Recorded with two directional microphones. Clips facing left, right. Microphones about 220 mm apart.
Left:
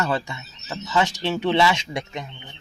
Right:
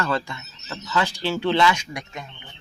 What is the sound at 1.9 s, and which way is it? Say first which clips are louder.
Speech: left 5 dB; 25° left (ahead or behind).